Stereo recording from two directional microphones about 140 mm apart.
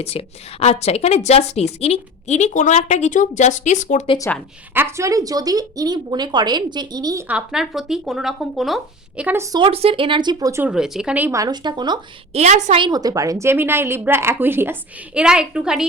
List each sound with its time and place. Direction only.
0.0 s a woman's voice: 45° left (ahead or behind)
4.3 s a woman's voice: 15° left (ahead or behind)
4.7 s a woman's voice: 15° right (ahead or behind)
7.3 s speech: 5° right (ahead or behind)
9.2 s a woman's voice: 20° right (ahead or behind)
9.6 s speech: 40° right (ahead or behind)
10.5 s a woman's voice: 10° right (ahead or behind)
11.3 s speech: 30° right (ahead or behind)
12.3 s a woman's voice: 50° right (ahead or behind)
12.7 s a woman's voice: 30° right (ahead or behind); by 15.9 s 5° right (ahead or behind)